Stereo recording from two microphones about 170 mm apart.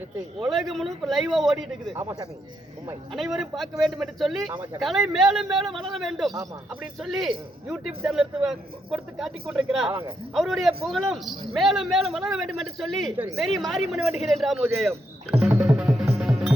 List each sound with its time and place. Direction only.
0.3 s a man's voice: centre (ahead or behind)
2.0 s a man's voice: 15° right (ahead or behind)
3.1 s a man's voice: centre (ahead or behind)
15.4 s music: 10° right (ahead or behind)